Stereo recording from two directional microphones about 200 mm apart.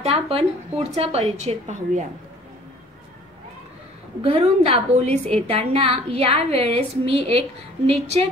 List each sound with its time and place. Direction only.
0.0 s a woman's voice: 30° right (ahead or behind)
4.2 s a woman's voice: 30° right (ahead or behind)